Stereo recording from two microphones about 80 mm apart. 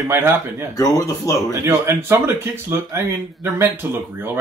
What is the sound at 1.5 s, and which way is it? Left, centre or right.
Speech, right.